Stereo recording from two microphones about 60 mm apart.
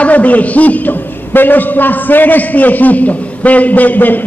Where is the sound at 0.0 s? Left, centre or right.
Left.